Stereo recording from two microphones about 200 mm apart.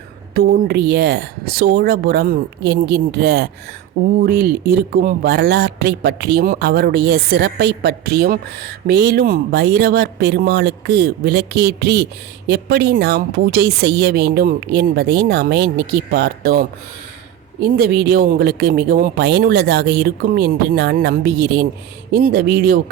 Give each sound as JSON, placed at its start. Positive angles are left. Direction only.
{"t": 0.3, "sound": "speech", "side_deg": -50}